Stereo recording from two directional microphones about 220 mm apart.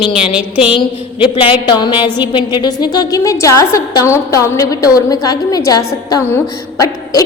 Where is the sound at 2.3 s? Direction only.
20° left (ahead or behind).